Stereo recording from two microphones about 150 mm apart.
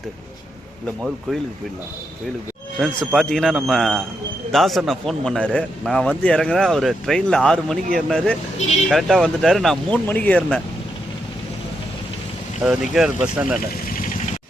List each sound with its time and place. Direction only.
2.7 s a man's voice: centre (ahead or behind)
8.5 s speech: 45° left (ahead or behind)
8.9 s a man's voice: centre (ahead or behind)
12.6 s a man's voice: centre (ahead or behind)